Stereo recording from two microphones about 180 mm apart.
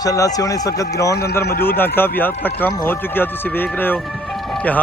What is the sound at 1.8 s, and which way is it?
Speech, 10° left (ahead or behind).